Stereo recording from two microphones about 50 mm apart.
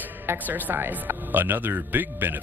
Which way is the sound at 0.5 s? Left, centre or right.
Right.